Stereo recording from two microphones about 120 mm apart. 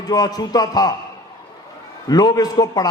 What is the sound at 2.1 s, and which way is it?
Speech, 35° left (ahead or behind).